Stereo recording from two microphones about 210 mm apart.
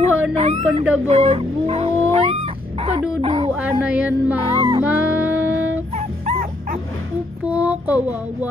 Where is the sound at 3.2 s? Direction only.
30° right (ahead or behind).